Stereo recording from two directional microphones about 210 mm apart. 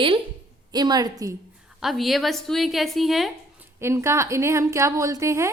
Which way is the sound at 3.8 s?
10° right (ahead or behind).